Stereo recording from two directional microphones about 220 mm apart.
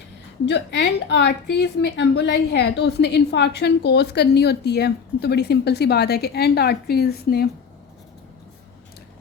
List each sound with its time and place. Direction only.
0.4 s a woman's voice: 50° left (ahead or behind)